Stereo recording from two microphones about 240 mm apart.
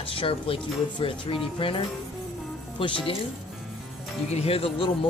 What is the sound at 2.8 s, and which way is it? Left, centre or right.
Speech, left.